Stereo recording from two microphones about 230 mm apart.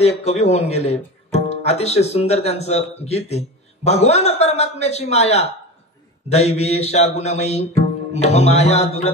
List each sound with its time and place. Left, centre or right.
0.0 s speech: left
4.8 s music: left